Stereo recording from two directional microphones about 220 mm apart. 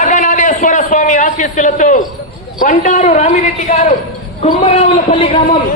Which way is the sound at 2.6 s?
35° left (ahead or behind).